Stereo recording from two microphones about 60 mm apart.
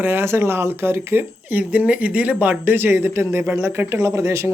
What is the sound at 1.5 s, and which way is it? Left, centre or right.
Speech, right.